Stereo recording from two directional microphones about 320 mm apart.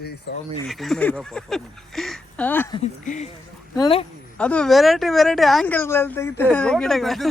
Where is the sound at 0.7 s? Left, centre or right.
Centre.